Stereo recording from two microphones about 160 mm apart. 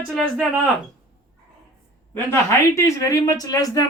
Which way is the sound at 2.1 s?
15° left (ahead or behind).